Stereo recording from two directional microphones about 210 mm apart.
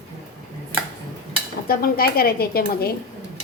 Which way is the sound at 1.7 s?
45° left (ahead or behind).